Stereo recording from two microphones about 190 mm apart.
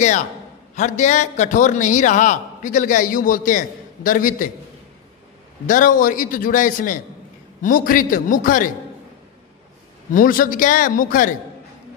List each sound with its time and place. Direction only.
0.7 s a man's voice: 40° left (ahead or behind)
5.7 s a man's voice: 45° left (ahead or behind)
10.1 s a man's voice: 45° left (ahead or behind)